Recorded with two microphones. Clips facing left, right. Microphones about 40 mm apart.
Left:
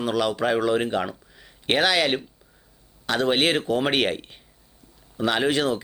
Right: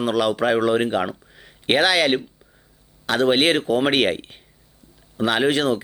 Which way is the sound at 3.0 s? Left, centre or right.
Right.